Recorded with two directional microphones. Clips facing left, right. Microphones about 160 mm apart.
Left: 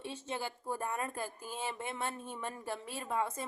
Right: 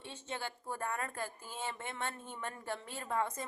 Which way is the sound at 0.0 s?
10° left (ahead or behind).